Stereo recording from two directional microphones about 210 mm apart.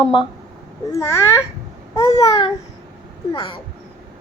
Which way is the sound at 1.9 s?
25° left (ahead or behind).